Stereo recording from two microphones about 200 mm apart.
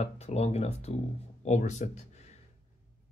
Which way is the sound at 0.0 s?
30° left (ahead or behind).